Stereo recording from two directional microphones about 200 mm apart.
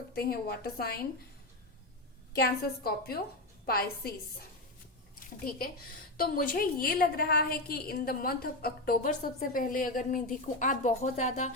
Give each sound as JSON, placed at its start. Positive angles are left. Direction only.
{"t": 0.2, "sound": "a woman's voice", "side_deg": 50}
{"t": 2.3, "sound": "a woman's voice", "side_deg": 50}
{"t": 5.5, "sound": "a woman's voice", "side_deg": 45}